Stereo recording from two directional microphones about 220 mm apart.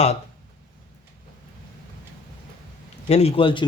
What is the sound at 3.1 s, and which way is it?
Speech, 25° left (ahead or behind).